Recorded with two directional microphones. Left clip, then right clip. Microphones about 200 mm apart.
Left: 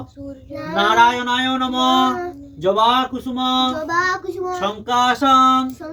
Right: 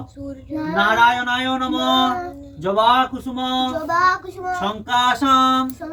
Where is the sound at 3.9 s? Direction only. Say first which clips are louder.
Right 2 dB; 25° left (ahead or behind).